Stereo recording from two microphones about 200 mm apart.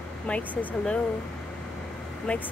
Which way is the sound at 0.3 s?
5° left (ahead or behind).